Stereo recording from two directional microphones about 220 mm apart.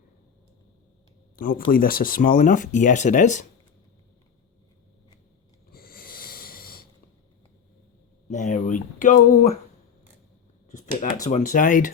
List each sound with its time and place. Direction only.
1.4 s speech: 40° left (ahead or behind)
5.7 s snort: 40° left (ahead or behind)
8.3 s a sound: 35° left (ahead or behind)
10.7 s speech: 35° left (ahead or behind)